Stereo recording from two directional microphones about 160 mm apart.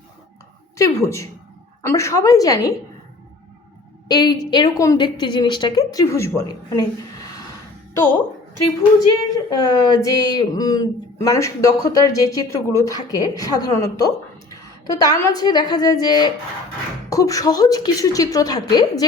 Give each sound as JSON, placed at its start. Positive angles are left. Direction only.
{"t": 0.8, "sound": "speech", "side_deg": 20}
{"t": 4.1, "sound": "speech", "side_deg": 25}
{"t": 9.3, "sound": "speech", "side_deg": 25}